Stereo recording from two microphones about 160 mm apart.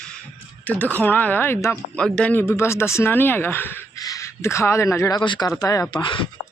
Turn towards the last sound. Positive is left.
turn(degrees=30)  # may be behind; listen again after turning